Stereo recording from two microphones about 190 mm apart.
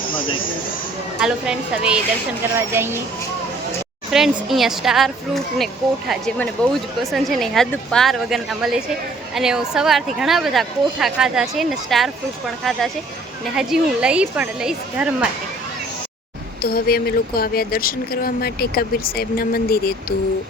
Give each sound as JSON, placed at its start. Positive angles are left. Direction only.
{"t": 1.2, "sound": "a woman's voice", "side_deg": -5}
{"t": 4.1, "sound": "speech", "side_deg": 0}
{"t": 13.6, "sound": "speech", "side_deg": -5}
{"t": 16.6, "sound": "speech", "side_deg": 55}